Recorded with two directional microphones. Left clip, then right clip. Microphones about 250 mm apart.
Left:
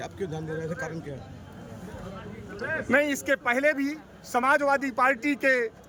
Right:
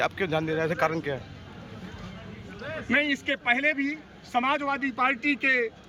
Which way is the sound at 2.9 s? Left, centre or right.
Centre.